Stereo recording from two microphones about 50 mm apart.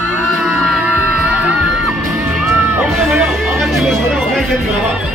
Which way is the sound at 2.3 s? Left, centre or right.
Centre.